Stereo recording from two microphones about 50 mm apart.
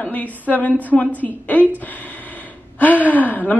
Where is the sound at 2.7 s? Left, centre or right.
Left.